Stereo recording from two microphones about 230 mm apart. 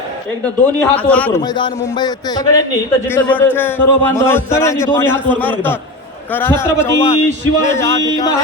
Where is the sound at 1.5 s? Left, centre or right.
Centre.